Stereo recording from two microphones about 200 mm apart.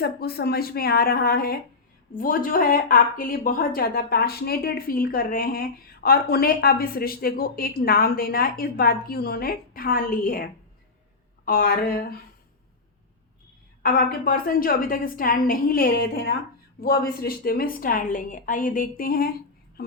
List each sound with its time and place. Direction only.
0.0 s a woman's voice: 50° left (ahead or behind)
11.4 s a woman's voice: 45° left (ahead or behind)
13.8 s a woman's voice: 45° left (ahead or behind)